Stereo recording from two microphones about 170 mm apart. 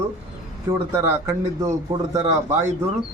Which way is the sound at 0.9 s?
15° right (ahead or behind).